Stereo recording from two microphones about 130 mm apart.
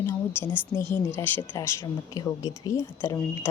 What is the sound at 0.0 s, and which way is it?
Speech, 15° left (ahead or behind).